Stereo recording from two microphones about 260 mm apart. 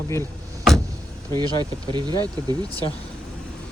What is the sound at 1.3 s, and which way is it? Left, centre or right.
Speech, centre.